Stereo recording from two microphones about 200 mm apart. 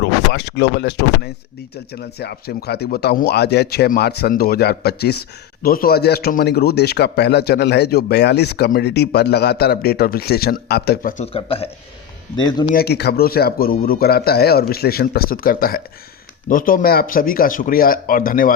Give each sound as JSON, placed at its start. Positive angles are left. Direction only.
{"t": 0.0, "sound": "speech", "side_deg": 55}
{"t": 11.2, "sound": "a man's voice", "side_deg": 30}
{"t": 12.7, "sound": "speech", "side_deg": 55}